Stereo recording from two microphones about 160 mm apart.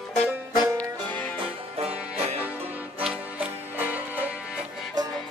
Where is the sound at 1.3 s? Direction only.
40° right (ahead or behind).